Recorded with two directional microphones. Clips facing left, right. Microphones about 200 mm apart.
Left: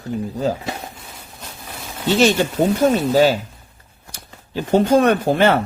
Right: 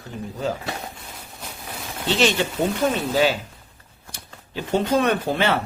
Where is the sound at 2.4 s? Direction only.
40° left (ahead or behind).